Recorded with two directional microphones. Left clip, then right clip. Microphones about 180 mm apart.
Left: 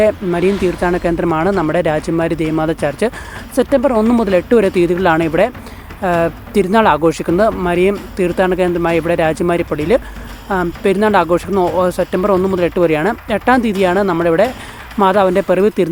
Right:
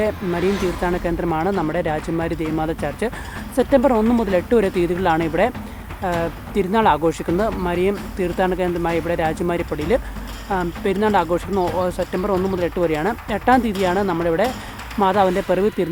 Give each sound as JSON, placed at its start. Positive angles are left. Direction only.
{"t": 0.0, "sound": "speech", "side_deg": 25}